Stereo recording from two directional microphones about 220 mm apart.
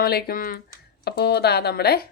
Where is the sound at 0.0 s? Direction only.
45° left (ahead or behind).